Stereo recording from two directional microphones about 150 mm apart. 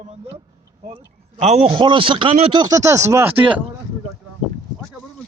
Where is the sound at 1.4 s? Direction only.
45° right (ahead or behind).